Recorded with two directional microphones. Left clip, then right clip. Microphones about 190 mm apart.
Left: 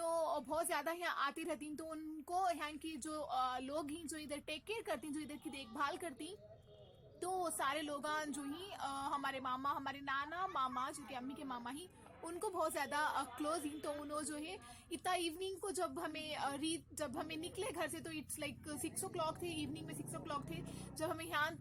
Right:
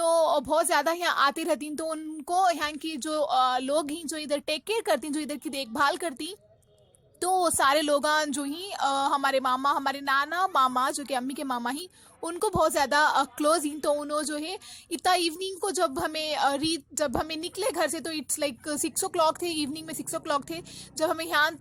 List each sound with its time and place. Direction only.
0.0 s a woman's voice: 40° right (ahead or behind)